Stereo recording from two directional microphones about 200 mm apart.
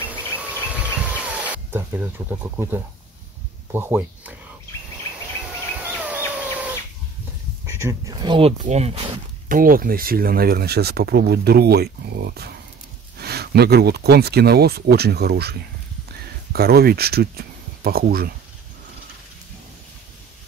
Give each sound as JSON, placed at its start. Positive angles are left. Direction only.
{"t": 0.0, "sound": "insect", "side_deg": -10}
{"t": 1.0, "sound": "a sound", "side_deg": -5}
{"t": 3.7, "sound": "speech", "side_deg": -10}
{"t": 5.8, "sound": "a sound", "side_deg": -10}
{"t": 7.6, "sound": "speech", "side_deg": -15}
{"t": 9.5, "sound": "speech", "side_deg": -45}
{"t": 16.5, "sound": "speech", "side_deg": -50}